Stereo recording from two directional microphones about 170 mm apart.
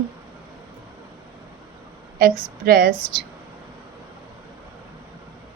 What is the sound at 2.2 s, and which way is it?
A woman's voice, 60° right (ahead or behind).